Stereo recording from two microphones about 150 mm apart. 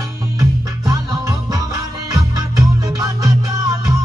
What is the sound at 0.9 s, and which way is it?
Music, 20° right (ahead or behind).